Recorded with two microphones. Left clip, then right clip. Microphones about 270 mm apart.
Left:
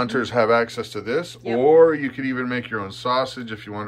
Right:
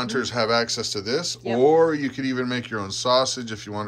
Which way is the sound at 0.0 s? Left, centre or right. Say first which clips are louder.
Left 4 dB; centre.